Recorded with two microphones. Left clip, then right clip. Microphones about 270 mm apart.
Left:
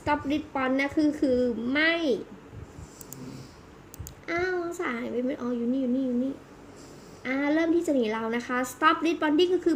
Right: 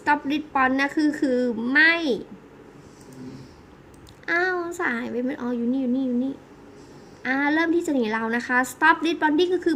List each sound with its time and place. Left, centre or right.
0.0 s a woman's voice: centre
4.3 s a woman's voice: centre
7.2 s a woman's voice: centre